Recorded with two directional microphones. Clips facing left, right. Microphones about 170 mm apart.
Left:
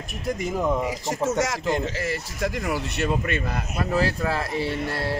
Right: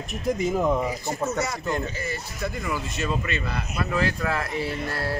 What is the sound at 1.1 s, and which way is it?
Speech, 90° left.